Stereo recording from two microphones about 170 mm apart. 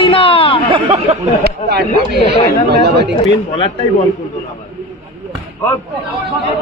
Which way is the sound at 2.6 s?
75° right (ahead or behind).